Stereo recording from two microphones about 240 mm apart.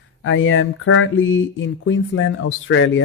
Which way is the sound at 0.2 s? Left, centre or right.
Left.